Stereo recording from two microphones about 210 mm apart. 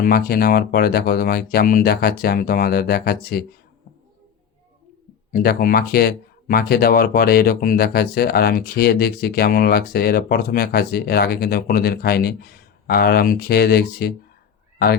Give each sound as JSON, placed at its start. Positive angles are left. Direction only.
{"t": 0.0, "sound": "speech", "side_deg": 45}
{"t": 5.3, "sound": "speech", "side_deg": 45}